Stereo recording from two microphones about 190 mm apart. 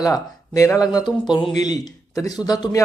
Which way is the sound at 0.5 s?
15° left (ahead or behind).